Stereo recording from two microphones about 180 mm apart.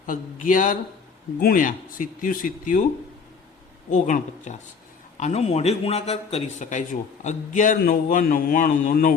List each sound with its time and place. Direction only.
0.0 s a man's voice: 45° left (ahead or behind)
3.8 s a man's voice: 45° left (ahead or behind)